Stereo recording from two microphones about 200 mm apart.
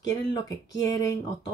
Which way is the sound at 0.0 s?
20° left (ahead or behind).